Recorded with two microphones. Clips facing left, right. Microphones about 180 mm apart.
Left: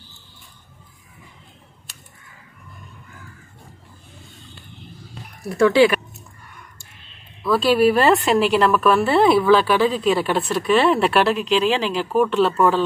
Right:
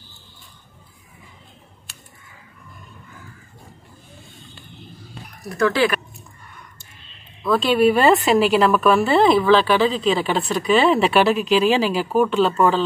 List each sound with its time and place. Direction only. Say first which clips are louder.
5.4 s speech: left 5 dB; 25° left (ahead or behind)
7.4 s a woman's voice: even; 5° left (ahead or behind)